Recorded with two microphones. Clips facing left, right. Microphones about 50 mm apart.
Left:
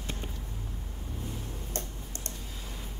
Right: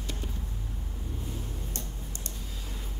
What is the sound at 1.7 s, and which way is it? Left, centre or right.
Tick-tock, left.